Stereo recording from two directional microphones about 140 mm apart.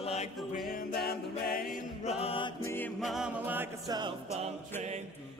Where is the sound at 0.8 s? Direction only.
90° left.